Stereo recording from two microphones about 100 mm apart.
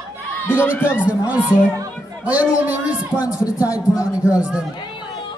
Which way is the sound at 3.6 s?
15° right (ahead or behind).